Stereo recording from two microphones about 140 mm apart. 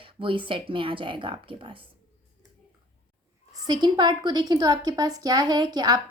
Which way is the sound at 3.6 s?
30° right (ahead or behind).